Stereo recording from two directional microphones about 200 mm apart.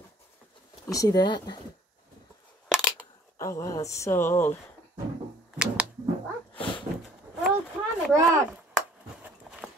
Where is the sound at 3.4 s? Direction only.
15° left (ahead or behind).